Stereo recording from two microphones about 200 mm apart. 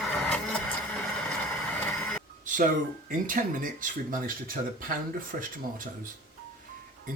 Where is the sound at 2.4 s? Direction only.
40° right (ahead or behind).